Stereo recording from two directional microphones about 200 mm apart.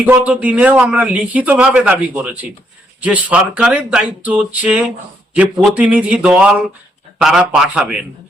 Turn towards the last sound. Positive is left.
turn(degrees=-5)  # may be behind; listen again after turning